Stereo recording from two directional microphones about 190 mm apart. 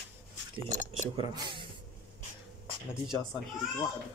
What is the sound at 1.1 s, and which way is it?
Speech, 25° right (ahead or behind).